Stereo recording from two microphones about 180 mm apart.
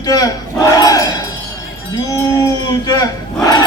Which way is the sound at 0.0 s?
20° left (ahead or behind).